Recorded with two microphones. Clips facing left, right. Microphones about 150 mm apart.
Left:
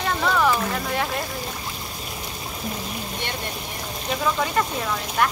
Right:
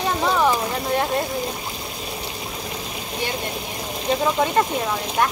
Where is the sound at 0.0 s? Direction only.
20° right (ahead or behind).